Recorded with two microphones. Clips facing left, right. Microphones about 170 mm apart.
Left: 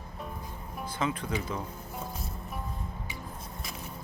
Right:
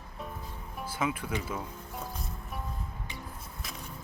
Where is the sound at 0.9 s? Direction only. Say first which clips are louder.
Even; 10° right (ahead or behind).